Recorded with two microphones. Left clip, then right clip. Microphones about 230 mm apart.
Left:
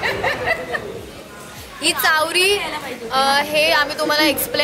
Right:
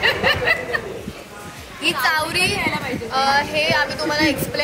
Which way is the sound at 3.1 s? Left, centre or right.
Left.